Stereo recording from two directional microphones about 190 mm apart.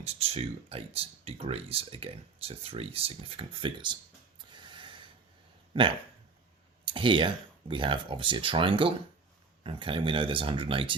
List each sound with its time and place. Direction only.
0.0 s speech: 30° right (ahead or behind)
4.5 s snort: 25° right (ahead or behind)
5.7 s speech: 25° right (ahead or behind)